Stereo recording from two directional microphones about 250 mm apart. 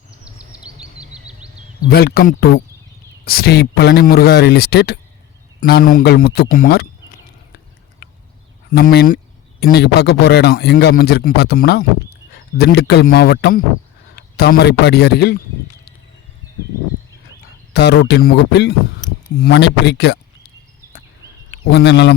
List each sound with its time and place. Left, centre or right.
0.3 s bird vocalization: centre
1.1 s a sound: centre
1.9 s speech: left
8.7 s speech: left
17.7 s speech: left
21.5 s speech: left